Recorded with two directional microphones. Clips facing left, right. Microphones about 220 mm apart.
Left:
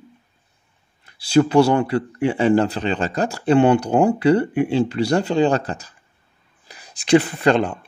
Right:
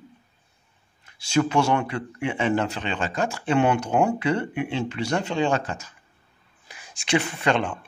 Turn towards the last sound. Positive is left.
turn(degrees=35)  # may be behind; listen again after turning